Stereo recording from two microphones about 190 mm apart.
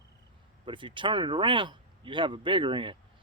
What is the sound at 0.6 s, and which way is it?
Speech, 25° right (ahead or behind).